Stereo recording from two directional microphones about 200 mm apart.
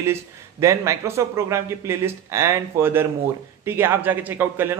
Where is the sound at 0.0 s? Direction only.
15° right (ahead or behind).